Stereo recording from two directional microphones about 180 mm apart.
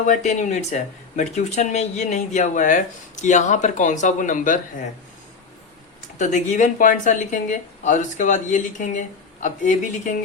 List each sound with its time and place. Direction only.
0.1 s speech: 40° left (ahead or behind)
6.1 s speech: 45° left (ahead or behind)